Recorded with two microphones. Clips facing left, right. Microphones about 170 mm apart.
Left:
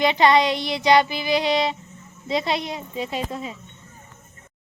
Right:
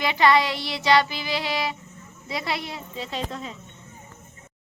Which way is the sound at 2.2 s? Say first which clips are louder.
Left 6 dB; 20° left (ahead or behind).